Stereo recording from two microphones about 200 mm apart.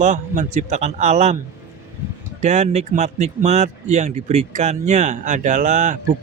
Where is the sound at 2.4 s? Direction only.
35° right (ahead or behind).